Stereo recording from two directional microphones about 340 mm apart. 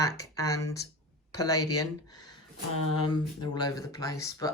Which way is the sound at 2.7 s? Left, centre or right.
Left.